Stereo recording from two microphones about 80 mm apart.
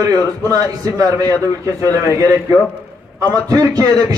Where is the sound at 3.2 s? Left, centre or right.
Right.